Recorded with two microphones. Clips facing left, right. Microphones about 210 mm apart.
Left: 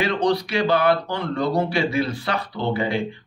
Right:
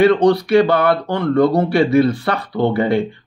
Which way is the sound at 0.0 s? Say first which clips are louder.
Right 9 dB; 60° right (ahead or behind).